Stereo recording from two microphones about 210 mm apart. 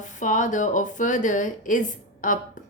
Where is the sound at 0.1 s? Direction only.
35° left (ahead or behind).